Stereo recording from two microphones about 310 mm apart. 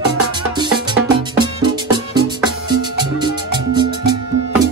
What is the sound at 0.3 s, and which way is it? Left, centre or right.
Music, centre.